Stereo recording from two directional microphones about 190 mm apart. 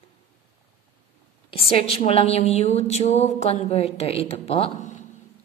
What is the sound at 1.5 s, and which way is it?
A woman's voice, 30° left (ahead or behind).